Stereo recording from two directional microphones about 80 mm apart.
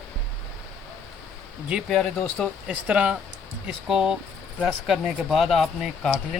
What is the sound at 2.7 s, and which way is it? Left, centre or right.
Speech, centre.